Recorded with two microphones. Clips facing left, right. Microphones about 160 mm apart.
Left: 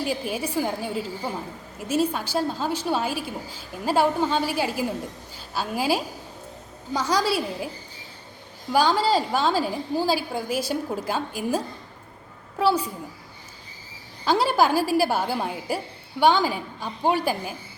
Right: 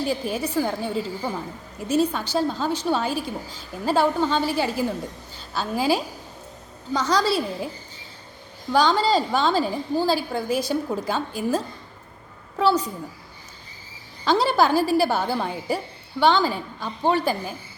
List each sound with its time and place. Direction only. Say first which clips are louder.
0.0 s a woman's voice: right 2 dB; 10° left (ahead or behind)
8.7 s a woman's voice: right 1 dB; 10° left (ahead or behind)
14.3 s a woman's voice: right 1 dB; 10° left (ahead or behind)